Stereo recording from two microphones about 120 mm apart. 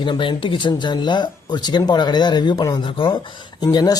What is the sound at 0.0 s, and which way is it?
Speech, 45° left (ahead or behind).